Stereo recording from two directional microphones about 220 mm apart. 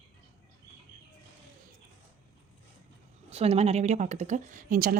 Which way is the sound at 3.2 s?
25° right (ahead or behind).